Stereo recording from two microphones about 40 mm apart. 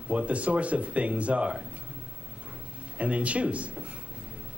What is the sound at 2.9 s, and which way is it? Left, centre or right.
Speech, right.